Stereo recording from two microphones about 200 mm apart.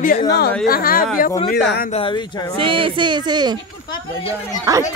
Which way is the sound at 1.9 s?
25° left (ahead or behind).